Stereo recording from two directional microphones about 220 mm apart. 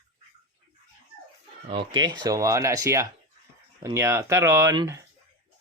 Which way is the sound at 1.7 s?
20° right (ahead or behind).